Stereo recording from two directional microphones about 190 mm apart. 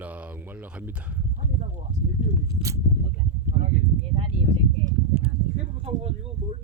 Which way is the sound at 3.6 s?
35° right (ahead or behind).